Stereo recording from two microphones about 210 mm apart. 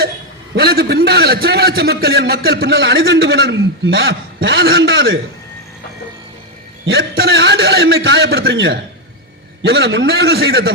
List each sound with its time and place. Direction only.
0.5 s a man's voice: 50° right (ahead or behind)
6.8 s a man's voice: 50° right (ahead or behind)